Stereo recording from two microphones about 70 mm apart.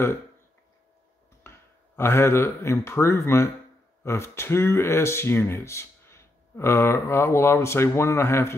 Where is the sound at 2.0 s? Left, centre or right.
Left.